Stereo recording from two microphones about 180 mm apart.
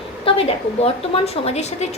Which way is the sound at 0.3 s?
30° left (ahead or behind).